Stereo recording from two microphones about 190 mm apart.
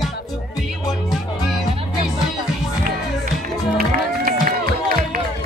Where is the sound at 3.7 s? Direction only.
50° right (ahead or behind).